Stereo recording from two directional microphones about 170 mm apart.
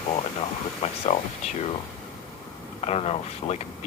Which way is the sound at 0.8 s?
40° left (ahead or behind).